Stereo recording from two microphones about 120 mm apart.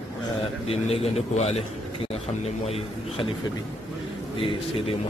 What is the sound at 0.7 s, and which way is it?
A man's voice, 60° left (ahead or behind).